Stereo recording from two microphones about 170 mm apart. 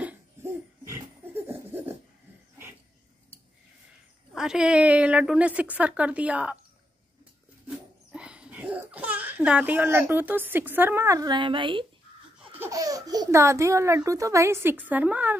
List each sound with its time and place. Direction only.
0.0 s laughter: 10° right (ahead or behind)
4.3 s a woman's voice: 5° right (ahead or behind)
7.6 s laughter: 5° right (ahead or behind); by 11.8 s 30° right (ahead or behind)
12.5 s speech: 20° right (ahead or behind)